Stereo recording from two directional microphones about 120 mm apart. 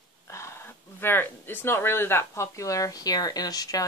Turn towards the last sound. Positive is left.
turn(degrees=30)  # may be behind; listen again after turning